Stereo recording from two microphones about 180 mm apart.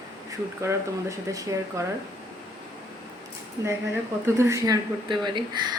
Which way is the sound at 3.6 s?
20° right (ahead or behind).